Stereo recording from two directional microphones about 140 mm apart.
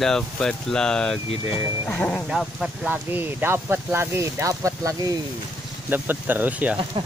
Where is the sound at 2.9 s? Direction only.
15° right (ahead or behind).